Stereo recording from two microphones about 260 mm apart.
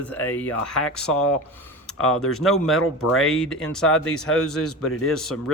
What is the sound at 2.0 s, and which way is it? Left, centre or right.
Speech, left.